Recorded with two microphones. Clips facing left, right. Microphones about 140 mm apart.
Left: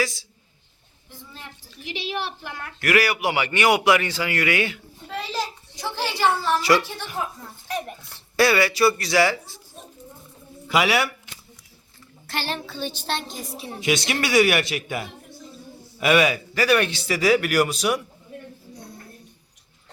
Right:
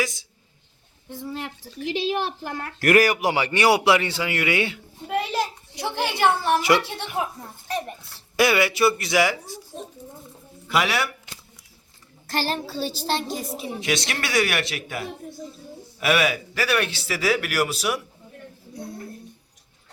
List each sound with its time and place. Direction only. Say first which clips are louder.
1.2 s a woman's voice: right 13 dB; 80° right
1.9 s a man's voice: right 5 dB; 45° right (ahead or behind); by 5.1 s 25° right (ahead or behind)
5.1 s a sound: right 4 dB; 55° right (ahead or behind)
6.0 s a woman's voice: right 1 dB; 55° right (ahead or behind)
6.4 s a man's voice: even; 20° right (ahead or behind)
8.4 s a man's voice: left 1 dB; 20° right (ahead or behind)
10.7 s a man's voice: left 2 dB; centre (ahead or behind)
12.3 s a man's voice: right 3 dB; 40° right (ahead or behind)
13.8 s a man's voice: left 5 dB; centre (ahead or behind)